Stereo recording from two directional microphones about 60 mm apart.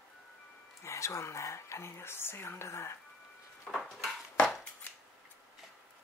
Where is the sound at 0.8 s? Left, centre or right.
Left.